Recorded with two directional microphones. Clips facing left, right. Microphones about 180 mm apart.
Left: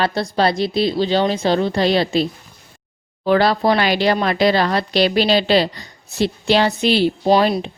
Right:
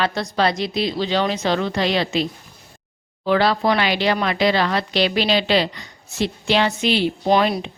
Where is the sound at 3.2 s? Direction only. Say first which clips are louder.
Left 3 dB; 40° left (ahead or behind).